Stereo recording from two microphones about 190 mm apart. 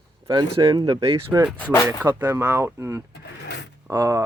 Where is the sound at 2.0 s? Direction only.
10° right (ahead or behind).